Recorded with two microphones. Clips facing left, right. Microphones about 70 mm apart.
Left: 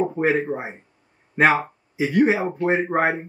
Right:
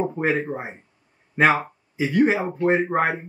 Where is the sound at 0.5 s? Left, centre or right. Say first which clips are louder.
Left 2 dB; centre.